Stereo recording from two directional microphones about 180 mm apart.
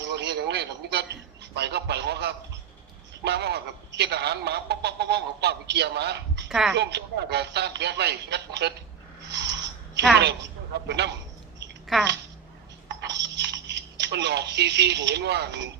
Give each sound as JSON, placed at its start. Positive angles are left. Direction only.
{"t": 0.0, "sound": "radio", "side_deg": -70}
{"t": 1.5, "sound": "a man's voice", "side_deg": -70}
{"t": 6.5, "sound": "a woman's voice", "side_deg": 0}
{"t": 6.7, "sound": "a man's voice", "side_deg": -70}
{"t": 9.2, "sound": "a sound", "side_deg": -75}
{"t": 10.2, "sound": "a man's voice", "side_deg": -70}
{"t": 11.9, "sound": "a woman's voice", "side_deg": 0}
{"t": 12.9, "sound": "coin", "side_deg": -75}
{"t": 13.2, "sound": "speech", "side_deg": -75}